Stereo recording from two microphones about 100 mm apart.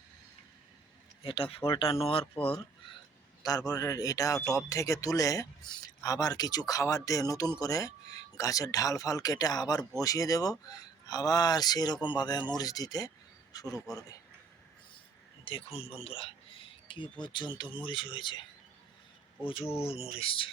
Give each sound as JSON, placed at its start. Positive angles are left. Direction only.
{"t": 1.2, "sound": "speech", "side_deg": 65}
{"t": 3.7, "sound": "speech", "side_deg": 35}
{"t": 15.4, "sound": "speech", "side_deg": 75}
{"t": 19.5, "sound": "speech", "side_deg": 65}
{"t": 19.8, "sound": "speech", "side_deg": 75}
{"t": 20.1, "sound": "speech", "side_deg": 65}